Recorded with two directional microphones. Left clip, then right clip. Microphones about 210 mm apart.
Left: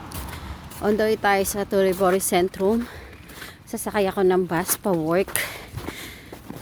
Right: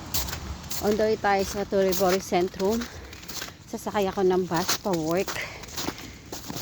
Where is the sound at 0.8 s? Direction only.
20° left (ahead or behind).